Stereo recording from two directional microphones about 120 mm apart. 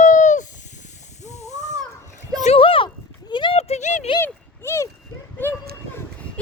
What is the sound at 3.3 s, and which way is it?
Clip-clop, 40° left (ahead or behind).